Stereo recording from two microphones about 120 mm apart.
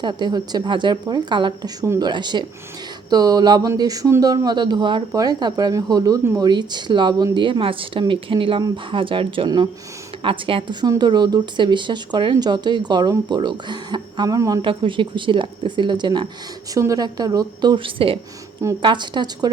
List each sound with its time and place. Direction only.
0.0 s speech: 35° right (ahead or behind)
14.6 s speech: 45° right (ahead or behind)
16.7 s speech: 30° right (ahead or behind)